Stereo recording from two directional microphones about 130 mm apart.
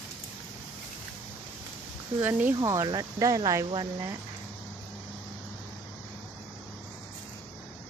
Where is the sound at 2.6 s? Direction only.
25° right (ahead or behind).